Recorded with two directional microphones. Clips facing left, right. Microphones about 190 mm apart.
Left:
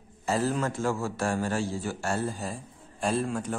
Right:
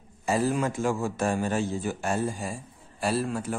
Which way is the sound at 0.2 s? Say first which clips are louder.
Right 2 dB; 15° right (ahead or behind).